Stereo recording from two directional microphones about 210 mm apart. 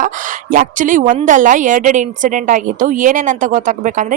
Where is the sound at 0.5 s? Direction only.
40° right (ahead or behind).